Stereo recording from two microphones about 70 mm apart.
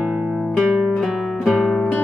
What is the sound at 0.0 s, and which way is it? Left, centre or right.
Music, centre.